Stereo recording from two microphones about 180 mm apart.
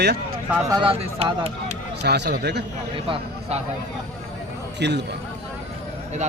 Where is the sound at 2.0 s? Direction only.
70° right (ahead or behind).